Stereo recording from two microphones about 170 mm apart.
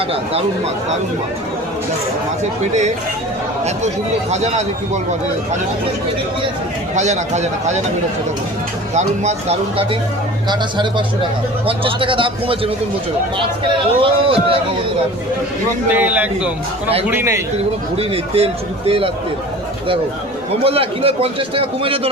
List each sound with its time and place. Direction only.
3.8 s a man's voice: 40° right (ahead or behind)
6.9 s a man's voice: 40° right (ahead or behind)
9.0 s a man's voice: 40° right (ahead or behind)
14.0 s a man's voice: 30° right (ahead or behind)
15.9 s a man's voice: 10° right (ahead or behind)
17.9 s a man's voice: 35° right (ahead or behind)
20.7 s a man's voice: 35° right (ahead or behind)